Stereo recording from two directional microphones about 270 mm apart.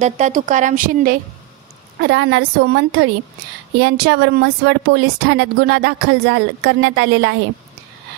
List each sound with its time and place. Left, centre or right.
0.0 s a woman's voice: right